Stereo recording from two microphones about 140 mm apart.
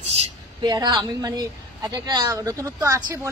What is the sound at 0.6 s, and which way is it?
Speech, 30° right (ahead or behind).